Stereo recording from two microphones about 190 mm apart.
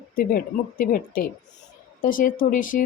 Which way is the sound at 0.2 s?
50° left (ahead or behind).